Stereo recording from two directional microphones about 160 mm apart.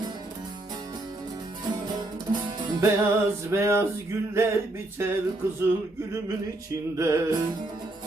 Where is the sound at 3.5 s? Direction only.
15° right (ahead or behind).